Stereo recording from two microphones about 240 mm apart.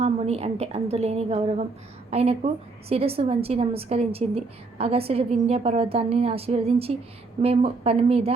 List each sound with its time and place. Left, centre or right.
0.0 s a woman's voice: right